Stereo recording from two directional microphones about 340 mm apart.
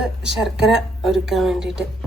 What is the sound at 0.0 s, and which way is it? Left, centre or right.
Speech, centre.